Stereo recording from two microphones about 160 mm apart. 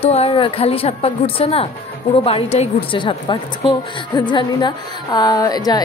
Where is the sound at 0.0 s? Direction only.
40° left (ahead or behind).